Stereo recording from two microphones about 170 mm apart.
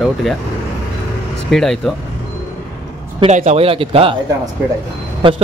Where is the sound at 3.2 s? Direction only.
40° right (ahead or behind).